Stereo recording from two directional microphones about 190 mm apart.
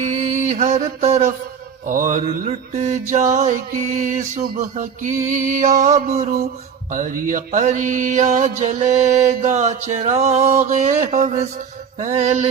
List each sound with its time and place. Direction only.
0.0 s mantra: 40° right (ahead or behind)